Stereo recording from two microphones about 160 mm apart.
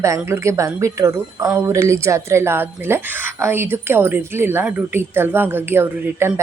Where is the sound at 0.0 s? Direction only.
15° right (ahead or behind).